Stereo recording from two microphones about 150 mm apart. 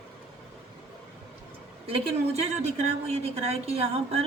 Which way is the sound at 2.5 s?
50° right (ahead or behind).